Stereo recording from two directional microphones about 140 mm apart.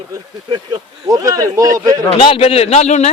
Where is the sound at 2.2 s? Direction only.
40° left (ahead or behind).